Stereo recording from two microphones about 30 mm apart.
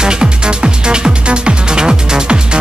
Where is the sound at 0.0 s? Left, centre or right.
Right.